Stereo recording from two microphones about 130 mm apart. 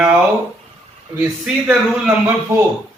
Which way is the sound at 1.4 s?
10° right (ahead or behind).